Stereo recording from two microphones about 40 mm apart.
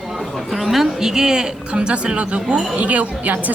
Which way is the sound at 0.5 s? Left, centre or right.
Centre.